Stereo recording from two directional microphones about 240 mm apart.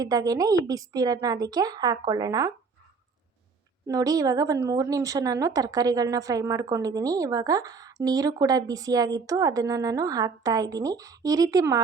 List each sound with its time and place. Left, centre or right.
0.0 s speech: centre
3.8 s speech: centre